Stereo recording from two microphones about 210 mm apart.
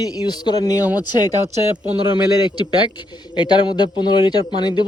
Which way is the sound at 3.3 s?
20° left (ahead or behind).